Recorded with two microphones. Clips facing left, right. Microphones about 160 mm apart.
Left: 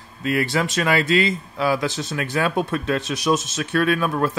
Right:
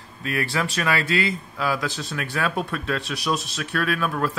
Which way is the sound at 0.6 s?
25° left (ahead or behind).